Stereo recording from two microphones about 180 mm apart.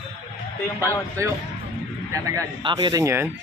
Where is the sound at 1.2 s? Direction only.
15° right (ahead or behind).